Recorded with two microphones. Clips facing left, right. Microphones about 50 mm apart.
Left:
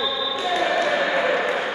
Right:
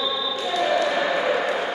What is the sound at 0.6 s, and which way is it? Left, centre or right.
Basketball bounce, centre.